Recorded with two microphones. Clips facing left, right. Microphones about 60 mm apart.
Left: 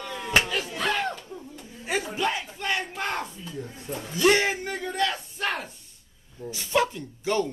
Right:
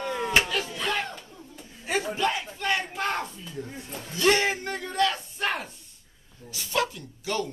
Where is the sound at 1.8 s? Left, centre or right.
Centre.